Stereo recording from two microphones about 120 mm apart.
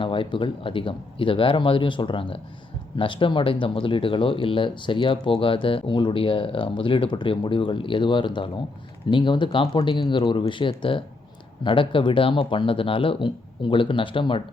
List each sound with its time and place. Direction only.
0.0 s speech: 45° left (ahead or behind)